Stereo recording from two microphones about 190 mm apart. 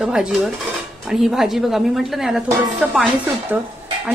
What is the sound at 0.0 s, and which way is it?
A woman's voice, 5° right (ahead or behind).